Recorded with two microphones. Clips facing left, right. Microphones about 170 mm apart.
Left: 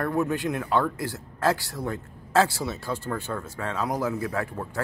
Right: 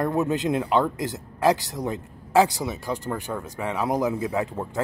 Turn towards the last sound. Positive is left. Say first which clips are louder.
# right 3 dB
turn(degrees=-20)  # may be behind; listen again after turning